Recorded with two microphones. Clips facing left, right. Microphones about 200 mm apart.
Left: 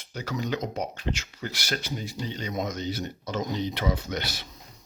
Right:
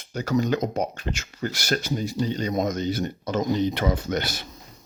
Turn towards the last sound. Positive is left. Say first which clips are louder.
# right 5 dB
turn(degrees=-50)  # may be behind; listen again after turning